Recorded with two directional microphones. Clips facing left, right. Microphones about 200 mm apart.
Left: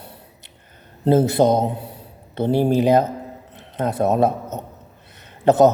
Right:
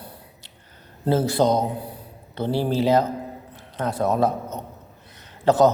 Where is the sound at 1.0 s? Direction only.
20° left (ahead or behind).